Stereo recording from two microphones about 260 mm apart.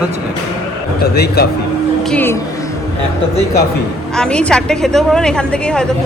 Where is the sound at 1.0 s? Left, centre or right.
Left.